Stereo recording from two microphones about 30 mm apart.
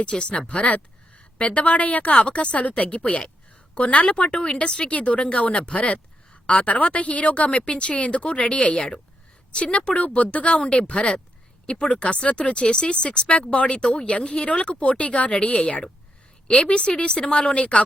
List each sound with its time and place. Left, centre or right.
0.0 s speech: left
0.3 s a woman's voice: left
4.9 s a woman's voice: left
7.5 s speech: left
9.7 s a woman's voice: left
16.6 s speech: left
17.5 s speech: left